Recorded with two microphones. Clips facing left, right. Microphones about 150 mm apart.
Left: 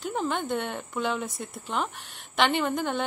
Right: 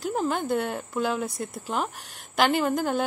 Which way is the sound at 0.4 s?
40° right (ahead or behind).